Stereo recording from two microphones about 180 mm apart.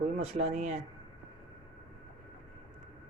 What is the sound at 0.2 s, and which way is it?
Speech, 40° right (ahead or behind).